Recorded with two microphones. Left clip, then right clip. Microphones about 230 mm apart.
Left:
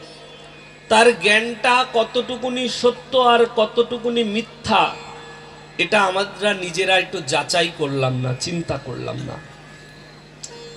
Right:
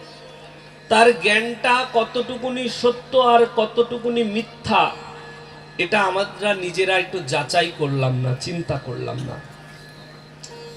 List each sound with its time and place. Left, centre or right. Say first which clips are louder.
0.9 s speech: left 1 dB; centre